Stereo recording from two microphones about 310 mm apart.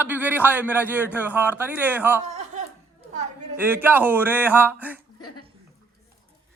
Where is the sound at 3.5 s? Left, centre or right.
Centre.